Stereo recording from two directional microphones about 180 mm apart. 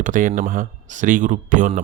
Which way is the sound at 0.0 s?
45° right (ahead or behind).